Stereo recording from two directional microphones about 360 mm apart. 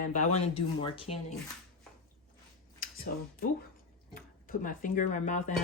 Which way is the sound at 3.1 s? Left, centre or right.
Left.